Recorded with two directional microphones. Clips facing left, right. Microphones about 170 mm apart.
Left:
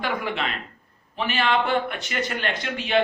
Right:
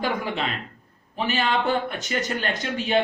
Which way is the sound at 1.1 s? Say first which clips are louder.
Left 1 dB; 40° right (ahead or behind).